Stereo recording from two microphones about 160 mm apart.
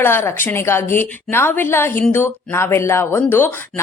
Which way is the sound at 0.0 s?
15° left (ahead or behind).